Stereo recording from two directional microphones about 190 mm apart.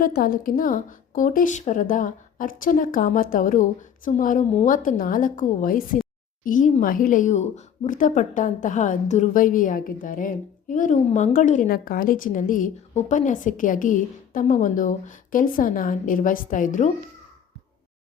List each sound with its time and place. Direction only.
0.0 s a woman's voice: 50° left (ahead or behind)